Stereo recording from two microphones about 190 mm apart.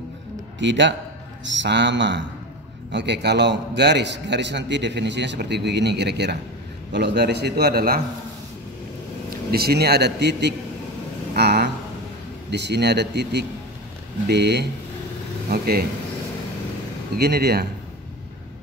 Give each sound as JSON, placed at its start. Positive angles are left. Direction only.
{"t": 0.6, "sound": "a man's voice", "side_deg": -70}
{"t": 9.5, "sound": "a man's voice", "side_deg": -55}
{"t": 11.3, "sound": "a sound", "side_deg": -60}
{"t": 12.4, "sound": "a man's voice", "side_deg": -65}
{"t": 17.2, "sound": "a man's voice", "side_deg": -55}